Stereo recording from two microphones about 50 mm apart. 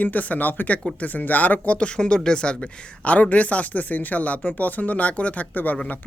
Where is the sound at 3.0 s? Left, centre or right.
Left.